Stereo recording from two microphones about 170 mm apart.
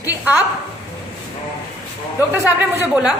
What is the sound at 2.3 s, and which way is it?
Speech, 10° right (ahead or behind).